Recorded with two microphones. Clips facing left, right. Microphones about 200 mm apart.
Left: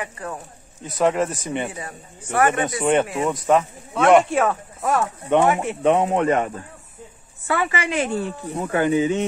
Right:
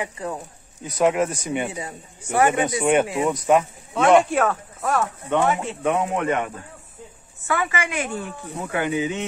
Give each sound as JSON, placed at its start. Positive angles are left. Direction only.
{"t": 0.0, "sound": "a man's voice", "side_deg": -15}
{"t": 0.8, "sound": "speech", "side_deg": 0}
{"t": 1.7, "sound": "a man's voice", "side_deg": -15}
{"t": 5.3, "sound": "speech", "side_deg": 20}